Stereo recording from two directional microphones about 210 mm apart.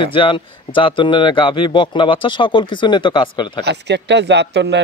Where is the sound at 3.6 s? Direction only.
55° right (ahead or behind).